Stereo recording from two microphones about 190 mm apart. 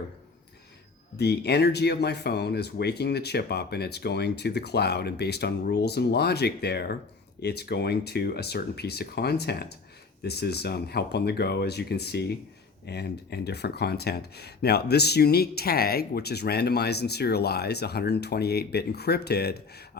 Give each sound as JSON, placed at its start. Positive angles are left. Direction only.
{"t": 1.1, "sound": "speech", "side_deg": 60}